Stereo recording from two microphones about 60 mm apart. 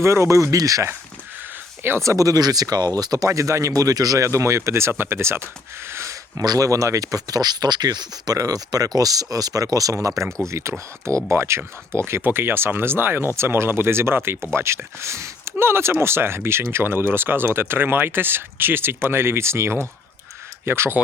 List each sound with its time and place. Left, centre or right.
0.0 s speech: right
2.0 s speech: right
5.9 s a sound: right
6.3 s speech: right